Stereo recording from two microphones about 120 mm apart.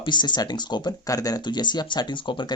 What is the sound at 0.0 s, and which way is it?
Speech, 40° left (ahead or behind).